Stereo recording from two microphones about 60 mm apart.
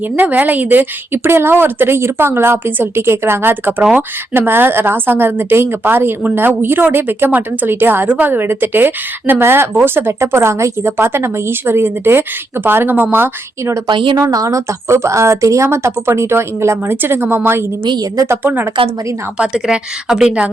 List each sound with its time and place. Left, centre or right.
0.2 s speech: right
13.7 s speech: right
15.6 s speech: right
19.4 s a woman's voice: centre